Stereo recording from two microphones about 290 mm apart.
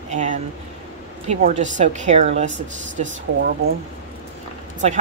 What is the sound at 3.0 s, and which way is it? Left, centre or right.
Speech, right.